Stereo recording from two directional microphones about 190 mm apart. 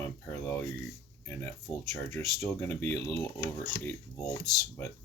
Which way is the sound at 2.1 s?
10° left (ahead or behind).